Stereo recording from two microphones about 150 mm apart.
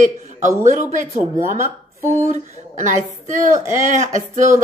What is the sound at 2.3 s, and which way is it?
Speech, 55° right (ahead or behind).